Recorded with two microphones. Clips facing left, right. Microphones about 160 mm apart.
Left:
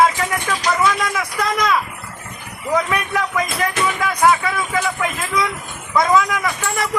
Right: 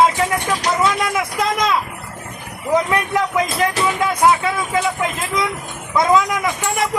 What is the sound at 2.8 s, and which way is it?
Speech, 25° right (ahead or behind).